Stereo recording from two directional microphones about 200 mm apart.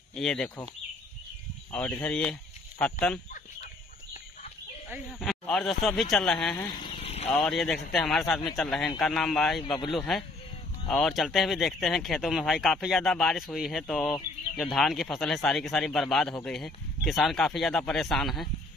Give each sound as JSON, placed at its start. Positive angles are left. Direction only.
{"t": 0.1, "sound": "speech", "side_deg": 5}
{"t": 1.7, "sound": "speech", "side_deg": 5}
{"t": 4.8, "sound": "speech", "side_deg": -5}
{"t": 6.5, "sound": "a sound", "side_deg": 25}
{"t": 7.2, "sound": "speech", "side_deg": 5}